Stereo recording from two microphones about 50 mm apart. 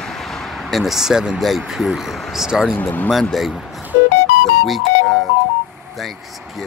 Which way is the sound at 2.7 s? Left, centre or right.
Left.